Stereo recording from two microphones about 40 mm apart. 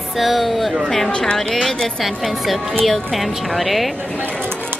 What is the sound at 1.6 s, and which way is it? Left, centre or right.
Speech, centre.